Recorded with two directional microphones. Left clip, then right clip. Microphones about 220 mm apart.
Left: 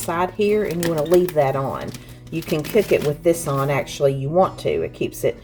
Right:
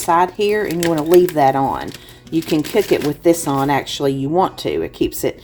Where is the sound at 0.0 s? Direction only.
35° right (ahead or behind).